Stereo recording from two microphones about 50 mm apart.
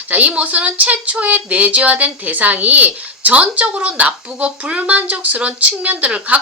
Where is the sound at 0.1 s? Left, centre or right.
Right.